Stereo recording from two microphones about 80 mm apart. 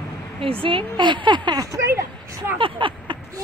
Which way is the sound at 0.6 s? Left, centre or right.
Right.